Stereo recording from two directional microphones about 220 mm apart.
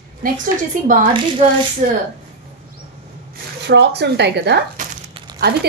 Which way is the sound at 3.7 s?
50° right (ahead or behind).